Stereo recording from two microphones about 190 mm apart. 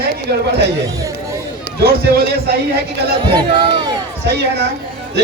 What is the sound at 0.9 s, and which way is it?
Speech, 20° right (ahead or behind).